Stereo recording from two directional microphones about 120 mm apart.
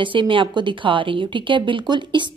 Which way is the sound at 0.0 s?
45° right (ahead or behind).